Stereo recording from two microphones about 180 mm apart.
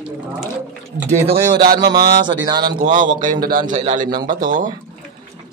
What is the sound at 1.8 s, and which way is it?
Speech, 60° right (ahead or behind).